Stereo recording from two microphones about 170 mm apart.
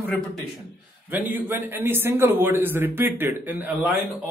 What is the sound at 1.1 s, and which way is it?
A man's voice, 10° right (ahead or behind).